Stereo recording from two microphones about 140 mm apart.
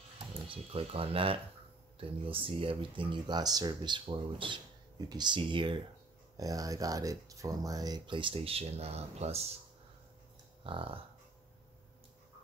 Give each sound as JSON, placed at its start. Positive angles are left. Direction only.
{"t": 0.5, "sound": "speech", "side_deg": -40}
{"t": 6.3, "sound": "speech", "side_deg": -25}
{"t": 10.6, "sound": "dog", "side_deg": -40}